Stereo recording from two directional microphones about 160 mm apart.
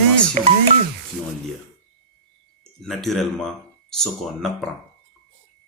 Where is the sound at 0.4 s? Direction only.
50° right (ahead or behind).